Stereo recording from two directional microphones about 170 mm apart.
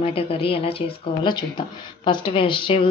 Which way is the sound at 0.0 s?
35° left (ahead or behind).